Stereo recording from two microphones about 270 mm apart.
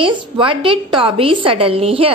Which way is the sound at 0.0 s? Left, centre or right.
Centre.